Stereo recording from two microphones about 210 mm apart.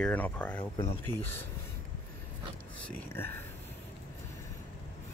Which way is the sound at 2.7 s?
5° left (ahead or behind).